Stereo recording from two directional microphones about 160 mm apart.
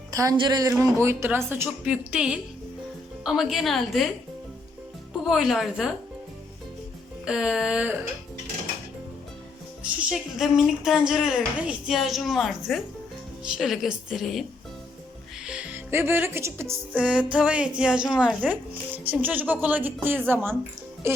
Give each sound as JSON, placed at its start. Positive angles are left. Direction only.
{"t": 0.1, "sound": "speech", "side_deg": -20}
{"t": 0.7, "sound": "speech", "side_deg": -15}
{"t": 5.2, "sound": "speech", "side_deg": 0}
{"t": 7.3, "sound": "speech", "side_deg": -5}
{"t": 9.8, "sound": "speech", "side_deg": -5}
{"t": 15.4, "sound": "speech", "side_deg": -5}